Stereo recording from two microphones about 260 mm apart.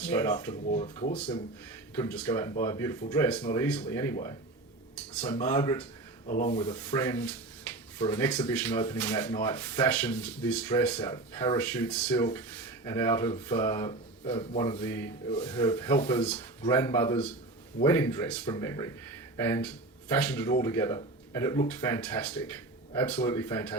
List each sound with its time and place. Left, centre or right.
0.0 s speech: centre
0.7 s speech: left
5.5 s speech: centre
6.2 s rub: left
6.5 s speech: centre
15.3 s speech: left